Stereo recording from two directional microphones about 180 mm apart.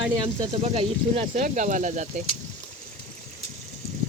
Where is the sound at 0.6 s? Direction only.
35° right (ahead or behind).